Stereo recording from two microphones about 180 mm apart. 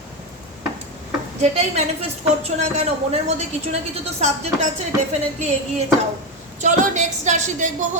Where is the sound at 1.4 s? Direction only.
40° right (ahead or behind).